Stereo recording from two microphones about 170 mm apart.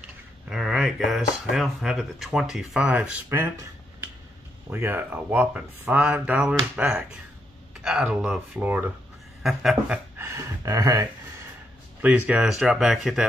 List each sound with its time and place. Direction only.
0.5 s speech: 5° right (ahead or behind)
10.1 s a sound: 15° right (ahead or behind)
12.0 s speech: 10° right (ahead or behind)